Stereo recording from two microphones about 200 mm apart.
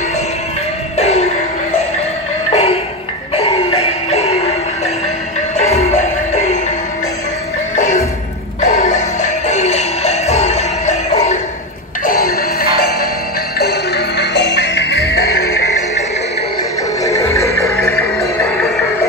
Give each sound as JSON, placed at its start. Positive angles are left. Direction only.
{"t": 0.9, "sound": "music", "side_deg": 30}
{"t": 2.5, "sound": "music", "side_deg": 30}
{"t": 5.6, "sound": "music", "side_deg": 30}
{"t": 7.7, "sound": "music", "side_deg": 35}
{"t": 12.1, "sound": "music", "side_deg": 45}
{"t": 17.0, "sound": "music", "side_deg": 15}